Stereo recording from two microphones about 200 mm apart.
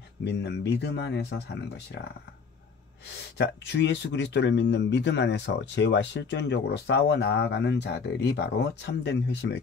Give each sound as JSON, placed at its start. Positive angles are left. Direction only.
{"t": 0.2, "sound": "speech", "side_deg": 60}
{"t": 3.1, "sound": "speech", "side_deg": 60}